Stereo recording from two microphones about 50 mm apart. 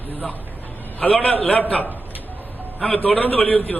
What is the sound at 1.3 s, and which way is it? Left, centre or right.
Speech, left.